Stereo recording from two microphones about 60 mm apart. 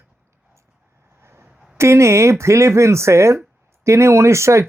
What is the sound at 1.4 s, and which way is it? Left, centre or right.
Speech, right.